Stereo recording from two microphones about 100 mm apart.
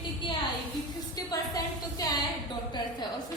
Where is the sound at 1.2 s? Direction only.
40° left (ahead or behind).